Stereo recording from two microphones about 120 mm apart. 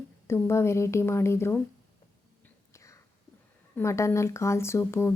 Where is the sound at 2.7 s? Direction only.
25° left (ahead or behind).